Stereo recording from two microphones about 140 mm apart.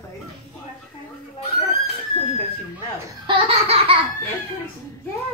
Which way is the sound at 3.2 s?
40° right (ahead or behind).